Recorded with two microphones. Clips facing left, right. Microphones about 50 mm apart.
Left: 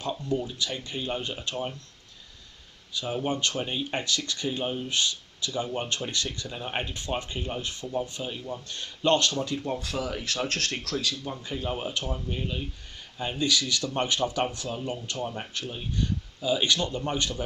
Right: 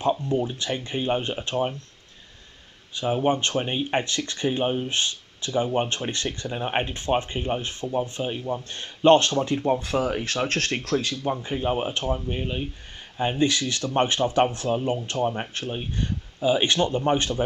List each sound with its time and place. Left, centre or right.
0.0 s speech: right
2.9 s speech: right